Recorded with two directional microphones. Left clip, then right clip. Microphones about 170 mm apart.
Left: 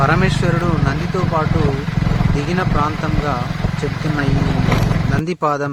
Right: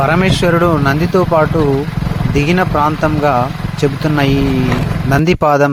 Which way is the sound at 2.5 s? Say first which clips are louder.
Right 5 dB; 50° right (ahead or behind).